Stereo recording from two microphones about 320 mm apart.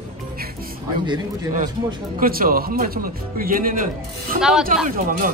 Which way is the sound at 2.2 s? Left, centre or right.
Right.